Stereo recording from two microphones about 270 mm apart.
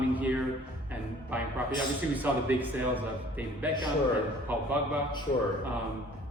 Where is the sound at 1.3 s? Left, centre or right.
Centre.